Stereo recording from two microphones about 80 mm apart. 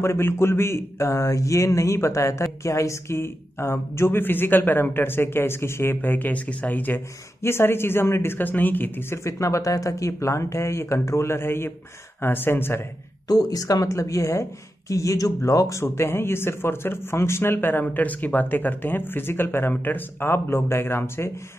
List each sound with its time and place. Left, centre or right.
0.0 s speech: left
13.3 s speech: left